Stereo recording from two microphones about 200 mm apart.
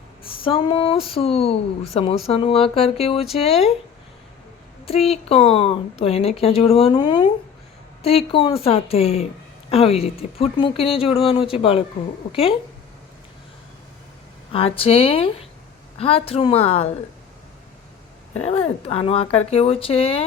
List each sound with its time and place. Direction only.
0.4 s speech: 25° left (ahead or behind)
4.9 s speech: 30° left (ahead or behind)
14.5 s speech: 30° left (ahead or behind)
18.4 s speech: 30° left (ahead or behind)